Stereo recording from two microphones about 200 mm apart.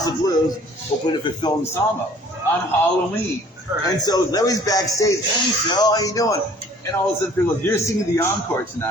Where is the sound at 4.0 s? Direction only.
20° left (ahead or behind).